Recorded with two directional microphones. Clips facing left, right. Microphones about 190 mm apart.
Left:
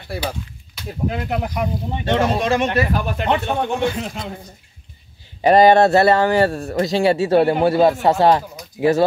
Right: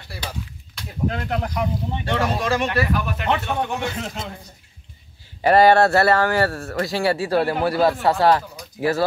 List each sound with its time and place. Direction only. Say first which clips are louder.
1.0 s speech: left 1 dB; 10° left (ahead or behind)
3.0 s speech: left 3 dB; 30° left (ahead or behind)
5.4 s speech: left 3 dB; 20° left (ahead or behind)